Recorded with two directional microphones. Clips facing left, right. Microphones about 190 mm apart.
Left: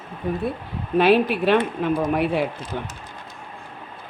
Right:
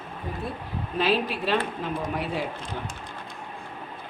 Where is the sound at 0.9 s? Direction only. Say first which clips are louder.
Left 8 dB; 60° left (ahead or behind).